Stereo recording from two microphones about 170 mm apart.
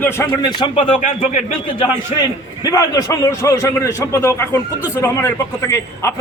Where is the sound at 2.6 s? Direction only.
20° left (ahead or behind).